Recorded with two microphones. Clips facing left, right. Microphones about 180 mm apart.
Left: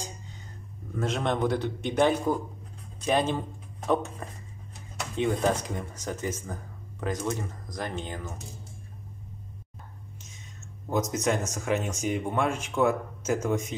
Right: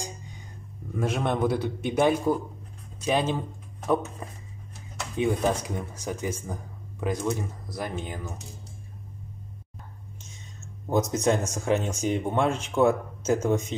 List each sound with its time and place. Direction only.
0.9 s speech: 10° right (ahead or behind)
5.1 s speech: 10° right (ahead or behind)
10.9 s speech: 30° right (ahead or behind)